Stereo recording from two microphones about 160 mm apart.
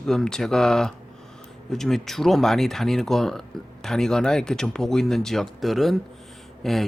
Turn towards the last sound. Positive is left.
turn(degrees=0)  # may be behind; listen again after turning